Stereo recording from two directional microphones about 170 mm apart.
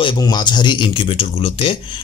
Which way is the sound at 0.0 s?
25° left (ahead or behind).